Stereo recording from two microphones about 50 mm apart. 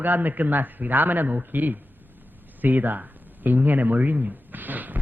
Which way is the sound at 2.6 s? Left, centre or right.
Right.